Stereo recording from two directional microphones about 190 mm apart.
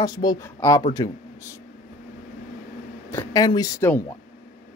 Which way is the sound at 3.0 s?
15° left (ahead or behind).